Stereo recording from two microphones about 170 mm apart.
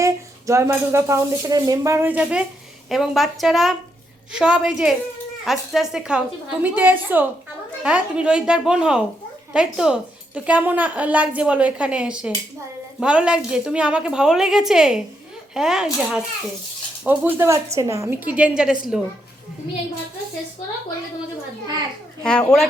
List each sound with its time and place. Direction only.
0.0 s a woman's voice: 15° right (ahead or behind)
22.2 s a woman's voice: 5° left (ahead or behind)